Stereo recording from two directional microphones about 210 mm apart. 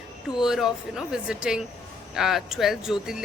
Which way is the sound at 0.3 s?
Centre (ahead or behind).